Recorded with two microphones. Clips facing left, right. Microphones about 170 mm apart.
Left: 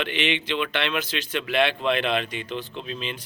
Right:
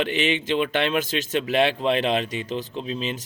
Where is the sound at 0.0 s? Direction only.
40° right (ahead or behind).